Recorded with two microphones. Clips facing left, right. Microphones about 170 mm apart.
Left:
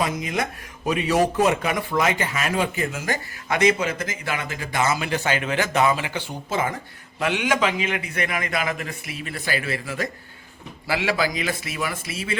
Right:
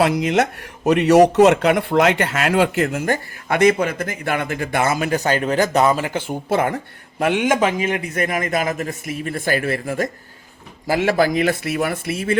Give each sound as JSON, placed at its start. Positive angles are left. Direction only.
{"t": 0.0, "sound": "speech", "side_deg": -75}
{"t": 7.2, "sound": "a man's voice", "side_deg": -50}